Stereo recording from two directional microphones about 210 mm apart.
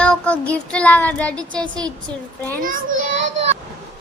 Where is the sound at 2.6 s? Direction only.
40° right (ahead or behind).